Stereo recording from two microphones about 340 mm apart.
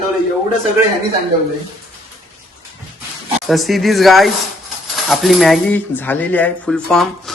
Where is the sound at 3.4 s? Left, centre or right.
Centre.